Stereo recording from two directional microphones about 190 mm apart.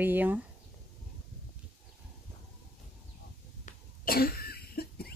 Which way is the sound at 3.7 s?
50° left (ahead or behind).